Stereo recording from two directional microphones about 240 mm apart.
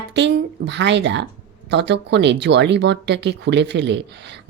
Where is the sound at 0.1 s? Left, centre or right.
Right.